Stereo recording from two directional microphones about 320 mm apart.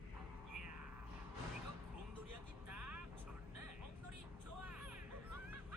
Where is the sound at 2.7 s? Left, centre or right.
Centre.